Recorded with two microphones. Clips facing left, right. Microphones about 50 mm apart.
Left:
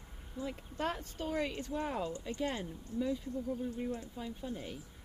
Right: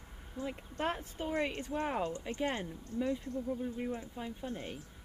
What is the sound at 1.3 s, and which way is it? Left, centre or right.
Speech, right.